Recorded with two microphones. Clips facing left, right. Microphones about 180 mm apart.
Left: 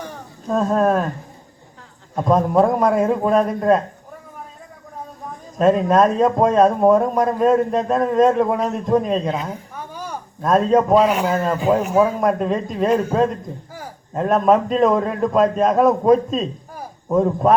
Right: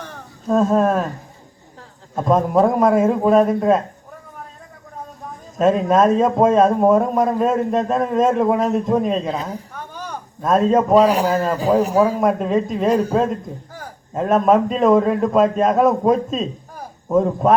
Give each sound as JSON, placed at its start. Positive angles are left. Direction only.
{"t": 0.4, "sound": "a man's voice", "side_deg": 0}
{"t": 2.1, "sound": "a man's voice", "side_deg": 0}
{"t": 5.5, "sound": "a man's voice", "side_deg": 0}
{"t": 9.7, "sound": "a sound", "side_deg": 10}
{"t": 10.4, "sound": "a man's voice", "side_deg": 0}
{"t": 11.0, "sound": "speech", "side_deg": -35}
{"t": 11.3, "sound": "a man's voice", "side_deg": 0}